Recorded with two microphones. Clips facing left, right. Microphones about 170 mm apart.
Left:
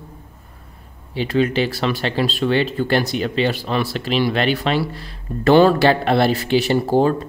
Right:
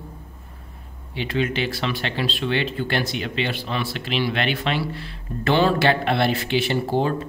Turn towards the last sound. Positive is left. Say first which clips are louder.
# left 6 dB
turn(degrees=40)  # may be behind; listen again after turning